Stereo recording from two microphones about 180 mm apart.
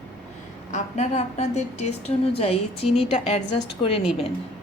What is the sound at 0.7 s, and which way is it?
A woman's voice, 40° left (ahead or behind).